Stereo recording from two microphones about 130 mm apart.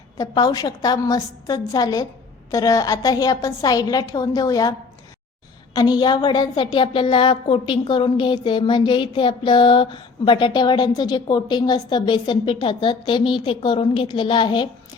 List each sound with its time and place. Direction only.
0.2 s a woman's voice: 30° left (ahead or behind)
5.7 s a woman's voice: 30° left (ahead or behind)